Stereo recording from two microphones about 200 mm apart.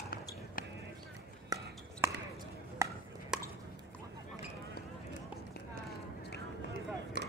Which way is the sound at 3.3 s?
5° right (ahead or behind).